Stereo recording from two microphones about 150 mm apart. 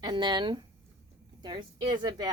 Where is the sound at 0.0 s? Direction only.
30° right (ahead or behind).